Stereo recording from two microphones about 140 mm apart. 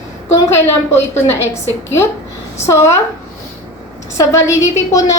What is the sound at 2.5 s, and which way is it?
Speech, 20° left (ahead or behind).